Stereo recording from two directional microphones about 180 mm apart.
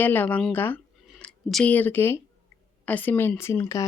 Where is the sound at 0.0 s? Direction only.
10° left (ahead or behind).